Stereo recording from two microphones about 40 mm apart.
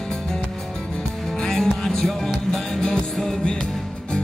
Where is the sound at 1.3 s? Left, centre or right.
Centre.